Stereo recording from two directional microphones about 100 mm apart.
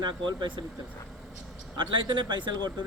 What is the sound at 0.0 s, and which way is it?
Speech, 50° right (ahead or behind).